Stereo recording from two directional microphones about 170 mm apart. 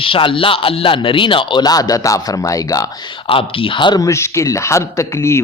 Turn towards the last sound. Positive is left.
turn(degrees=15)  # may be behind; listen again after turning